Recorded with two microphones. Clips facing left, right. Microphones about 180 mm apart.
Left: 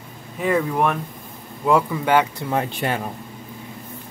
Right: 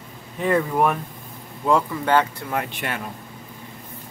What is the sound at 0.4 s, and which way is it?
Speech, centre (ahead or behind).